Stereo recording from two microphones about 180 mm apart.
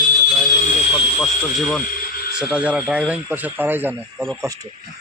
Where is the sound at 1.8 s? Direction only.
55° left (ahead or behind).